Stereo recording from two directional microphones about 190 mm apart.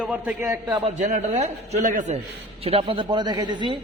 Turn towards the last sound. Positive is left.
turn(degrees=-25)  # may be behind; listen again after turning